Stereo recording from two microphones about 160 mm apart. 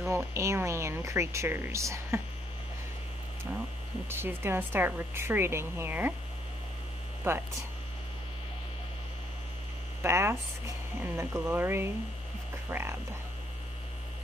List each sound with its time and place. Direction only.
0.1 s speech: 15° right (ahead or behind)
4.1 s speech: 15° right (ahead or behind)
7.3 s speech: 15° right (ahead or behind)
10.0 s speech: 15° right (ahead or behind)